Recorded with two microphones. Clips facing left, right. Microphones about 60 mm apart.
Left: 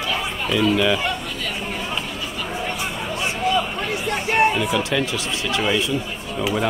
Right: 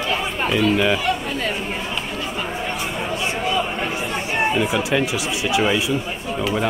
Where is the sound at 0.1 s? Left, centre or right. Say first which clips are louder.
Right 2 dB; right.